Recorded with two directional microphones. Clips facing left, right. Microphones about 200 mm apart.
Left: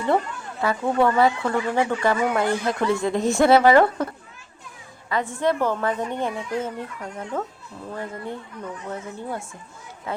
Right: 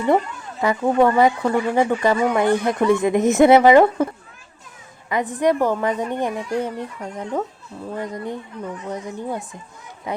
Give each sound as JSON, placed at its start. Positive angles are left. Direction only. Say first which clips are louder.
{"t": 0.6, "sound": "speech", "louder": "right 4 dB", "side_deg": -15}